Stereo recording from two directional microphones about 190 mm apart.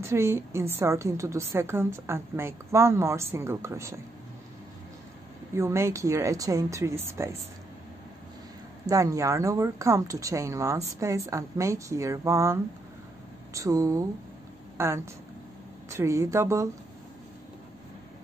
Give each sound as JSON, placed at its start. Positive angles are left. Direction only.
{"t": 0.0, "sound": "a woman's voice", "side_deg": -15}
{"t": 5.5, "sound": "a woman's voice", "side_deg": -15}
{"t": 8.8, "sound": "a woman's voice", "side_deg": -15}